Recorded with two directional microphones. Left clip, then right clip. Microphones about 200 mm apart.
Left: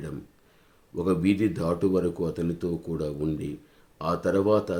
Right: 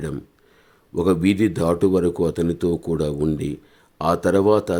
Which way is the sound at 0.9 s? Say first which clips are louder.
Right 6 dB; 40° right (ahead or behind).